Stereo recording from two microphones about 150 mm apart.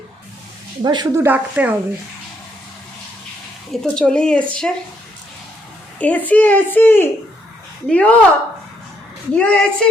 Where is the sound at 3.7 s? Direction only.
5° left (ahead or behind).